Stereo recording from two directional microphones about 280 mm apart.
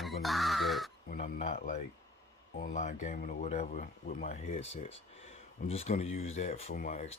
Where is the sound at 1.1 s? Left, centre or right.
Left.